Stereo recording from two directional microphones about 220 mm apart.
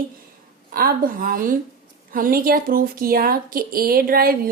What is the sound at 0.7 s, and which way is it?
Speech, 40° right (ahead or behind).